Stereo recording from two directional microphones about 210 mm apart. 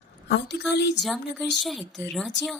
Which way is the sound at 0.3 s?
55° left (ahead or behind).